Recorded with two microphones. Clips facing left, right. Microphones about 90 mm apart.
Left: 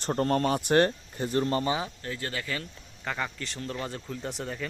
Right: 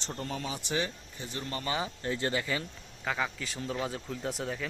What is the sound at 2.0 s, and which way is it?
Speech, 20° right (ahead or behind).